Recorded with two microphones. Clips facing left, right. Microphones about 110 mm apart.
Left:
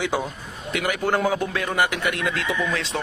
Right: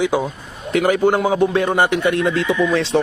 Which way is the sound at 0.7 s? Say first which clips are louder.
Right 9 dB; 35° right (ahead or behind).